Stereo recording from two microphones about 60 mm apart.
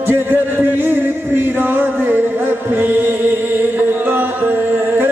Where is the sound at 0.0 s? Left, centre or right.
Right.